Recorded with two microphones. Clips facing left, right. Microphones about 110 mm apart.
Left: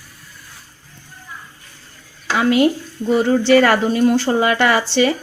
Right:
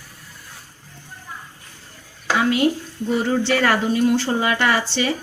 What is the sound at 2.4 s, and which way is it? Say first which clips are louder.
A woman's voice: left 4 dB; 70° left (ahead or behind).